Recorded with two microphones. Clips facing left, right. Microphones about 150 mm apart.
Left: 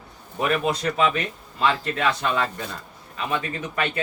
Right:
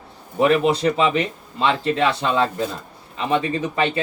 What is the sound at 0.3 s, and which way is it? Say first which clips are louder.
Speech: right 7 dB; 30° right (ahead or behind).